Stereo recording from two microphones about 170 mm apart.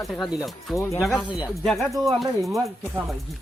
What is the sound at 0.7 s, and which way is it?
Speech, 15° left (ahead or behind).